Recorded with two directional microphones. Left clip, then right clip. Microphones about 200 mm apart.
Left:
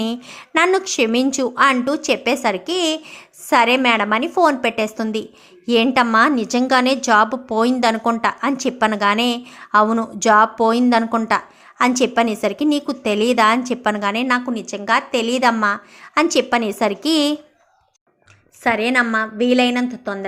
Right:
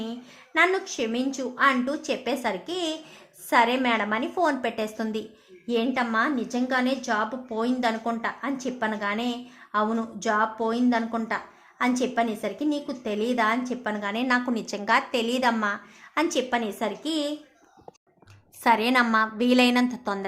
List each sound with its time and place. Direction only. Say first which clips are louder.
0.0 s a woman's voice: left 11 dB; 30° left (ahead or behind)
18.6 s a woman's voice: left 4 dB; 10° left (ahead or behind)